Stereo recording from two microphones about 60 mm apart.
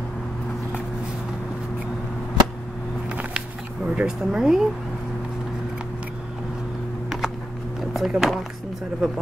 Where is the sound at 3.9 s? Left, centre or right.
Centre.